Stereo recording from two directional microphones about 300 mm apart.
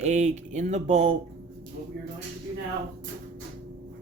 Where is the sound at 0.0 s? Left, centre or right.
Right.